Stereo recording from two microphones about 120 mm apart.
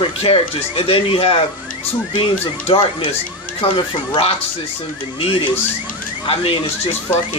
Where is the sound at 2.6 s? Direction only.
50° left (ahead or behind).